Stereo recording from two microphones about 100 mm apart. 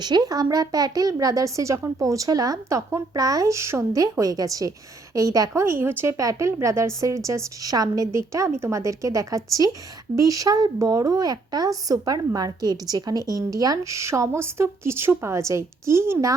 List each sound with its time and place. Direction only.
0.0 s a child's voice: 45° right (ahead or behind); by 6.1 s 25° right (ahead or behind)
6.1 s a child's voice: 35° right (ahead or behind)